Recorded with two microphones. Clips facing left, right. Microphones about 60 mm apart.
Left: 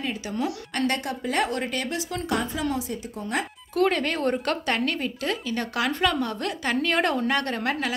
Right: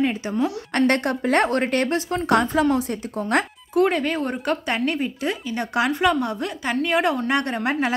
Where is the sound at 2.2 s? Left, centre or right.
Right.